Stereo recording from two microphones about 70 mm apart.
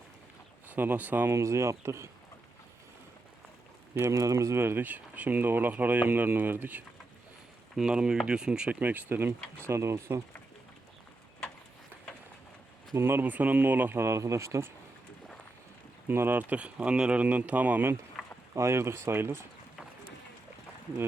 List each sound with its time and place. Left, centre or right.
0.7 s speech: right
1.3 s speech: right
4.0 s speech: right
4.5 s speech: right
7.8 s speech: centre
8.8 s speech: right
9.6 s speech: right
13.0 s speech: right
13.2 s speech: right
14.0 s speech: right
16.0 s speech: right
18.2 s rowboat: centre
18.5 s speech: right